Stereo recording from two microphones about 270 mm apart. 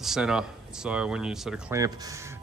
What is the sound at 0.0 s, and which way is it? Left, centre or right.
Speech, centre.